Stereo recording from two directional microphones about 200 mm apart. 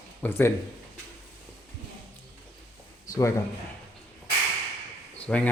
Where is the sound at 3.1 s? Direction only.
15° left (ahead or behind).